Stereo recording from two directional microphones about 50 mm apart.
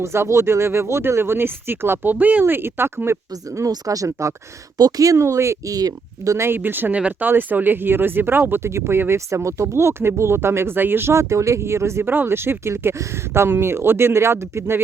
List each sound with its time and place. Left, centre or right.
0.0 s speech: right
2.1 s speech: right
2.4 s speech: right
3.9 s speech: right
5.0 s speech: right
6.5 s speech: right
8.6 s speech: right
10.8 s speech: right
11.1 s speech: right
12.0 s speech: right